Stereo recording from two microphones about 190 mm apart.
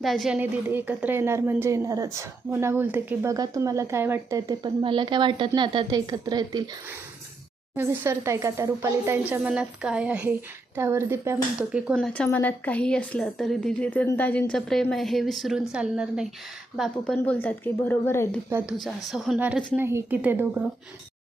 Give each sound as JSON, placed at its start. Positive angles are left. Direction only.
{"t": 0.0, "sound": "a woman's voice", "side_deg": 0}
{"t": 0.3, "sound": "speech", "side_deg": -10}
{"t": 7.8, "sound": "speech", "side_deg": -15}
{"t": 11.9, "sound": "a woman's voice", "side_deg": 5}
{"t": 18.5, "sound": "speech", "side_deg": -5}